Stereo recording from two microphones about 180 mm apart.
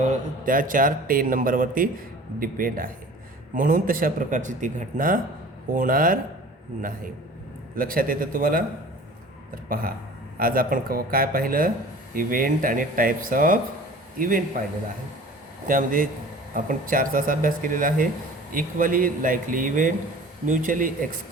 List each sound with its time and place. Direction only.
0.4 s a man's voice: 50° right (ahead or behind)
7.8 s a man's voice: 50° right (ahead or behind)
9.6 s a man's voice: 50° right (ahead or behind)
15.6 s a man's voice: 50° right (ahead or behind)